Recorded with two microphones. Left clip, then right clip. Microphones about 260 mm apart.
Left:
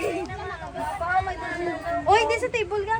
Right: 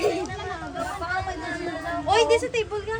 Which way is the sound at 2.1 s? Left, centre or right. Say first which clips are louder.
Even; left.